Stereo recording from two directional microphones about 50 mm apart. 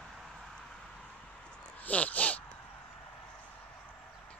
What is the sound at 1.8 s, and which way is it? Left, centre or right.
Speech, left.